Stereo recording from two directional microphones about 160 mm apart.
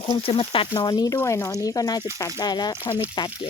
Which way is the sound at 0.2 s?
35° left (ahead or behind).